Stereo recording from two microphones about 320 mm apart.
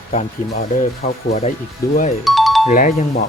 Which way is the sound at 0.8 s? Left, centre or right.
Left.